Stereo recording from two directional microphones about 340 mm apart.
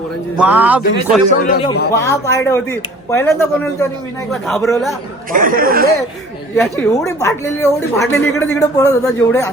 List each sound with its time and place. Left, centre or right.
0.3 s a man's voice: centre
1.5 s a man's voice: centre
5.3 s speech: right
6.6 s speech: centre